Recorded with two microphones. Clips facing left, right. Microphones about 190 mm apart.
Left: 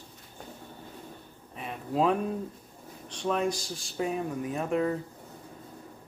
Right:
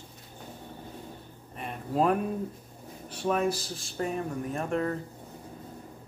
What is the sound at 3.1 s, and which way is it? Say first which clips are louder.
Speech: right 1 dB; 5° right (ahead or behind).